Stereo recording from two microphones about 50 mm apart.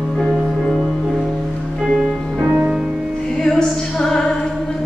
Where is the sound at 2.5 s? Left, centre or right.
Right.